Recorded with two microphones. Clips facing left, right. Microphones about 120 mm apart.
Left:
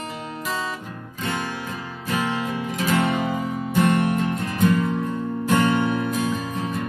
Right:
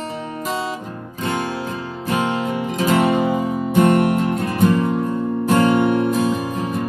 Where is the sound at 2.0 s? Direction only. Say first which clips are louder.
Right 4 dB; 30° right (ahead or behind).